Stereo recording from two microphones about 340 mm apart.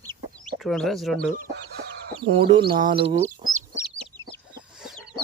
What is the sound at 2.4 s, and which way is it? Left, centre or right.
Speech, centre.